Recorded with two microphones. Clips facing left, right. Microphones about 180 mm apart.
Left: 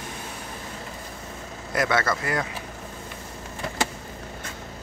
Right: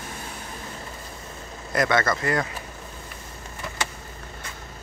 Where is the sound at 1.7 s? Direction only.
5° left (ahead or behind).